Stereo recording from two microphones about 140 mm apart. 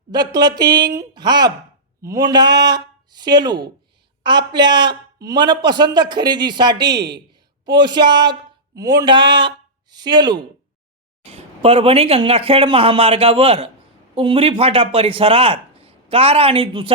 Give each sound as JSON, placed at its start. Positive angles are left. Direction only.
{"t": 0.1, "sound": "a man's voice", "side_deg": -30}
{"t": 11.3, "sound": "speech", "side_deg": -45}